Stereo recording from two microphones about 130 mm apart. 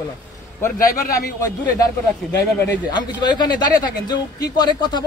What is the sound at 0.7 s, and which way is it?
Speech, 90° left.